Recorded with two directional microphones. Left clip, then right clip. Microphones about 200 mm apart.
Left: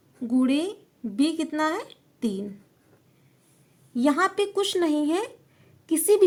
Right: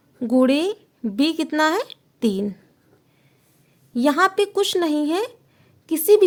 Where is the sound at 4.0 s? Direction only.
25° right (ahead or behind).